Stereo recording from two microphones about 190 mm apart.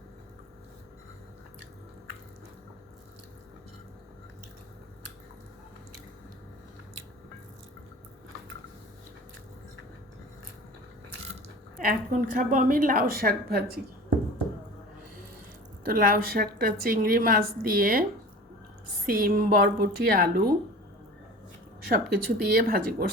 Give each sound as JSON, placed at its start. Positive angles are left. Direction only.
{"t": 11.4, "sound": "a woman's voice", "side_deg": -45}
{"t": 15.8, "sound": "a woman's voice", "side_deg": -50}
{"t": 19.0, "sound": "a woman's voice", "side_deg": -50}
{"t": 21.8, "sound": "a woman's voice", "side_deg": -50}